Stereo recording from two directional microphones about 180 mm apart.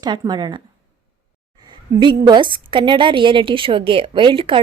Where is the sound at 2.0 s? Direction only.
25° right (ahead or behind).